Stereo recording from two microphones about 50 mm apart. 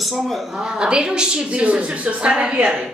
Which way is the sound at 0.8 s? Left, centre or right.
Centre.